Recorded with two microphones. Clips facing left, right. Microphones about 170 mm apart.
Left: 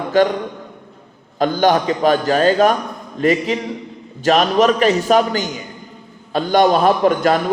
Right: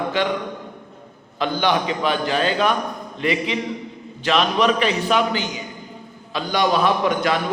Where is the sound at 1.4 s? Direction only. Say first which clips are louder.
Left 6 dB; 45° left (ahead or behind).